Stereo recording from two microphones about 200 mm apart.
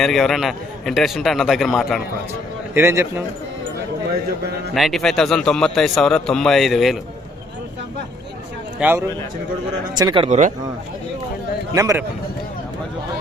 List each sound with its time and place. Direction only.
0.0 s a man's voice: centre (ahead or behind)
2.7 s a man's voice: 15° right (ahead or behind)
4.7 s a man's voice: centre (ahead or behind)
8.8 s a man's voice: 10° right (ahead or behind)
10.2 s speech: 35° right (ahead or behind)
11.7 s a man's voice: 15° right (ahead or behind)